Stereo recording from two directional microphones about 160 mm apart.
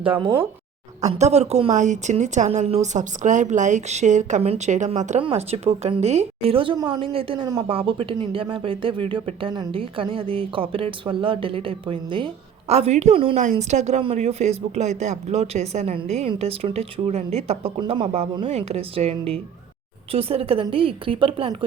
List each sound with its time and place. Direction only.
1.0 s a woman's voice: 45° right (ahead or behind)